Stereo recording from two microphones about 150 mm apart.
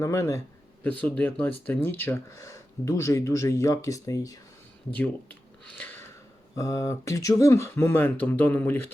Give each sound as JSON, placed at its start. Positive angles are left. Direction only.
{"t": 0.0, "sound": "speech", "side_deg": 20}
{"t": 0.9, "sound": "speech", "side_deg": 10}
{"t": 4.9, "sound": "speech", "side_deg": 10}
{"t": 6.6, "sound": "speech", "side_deg": 20}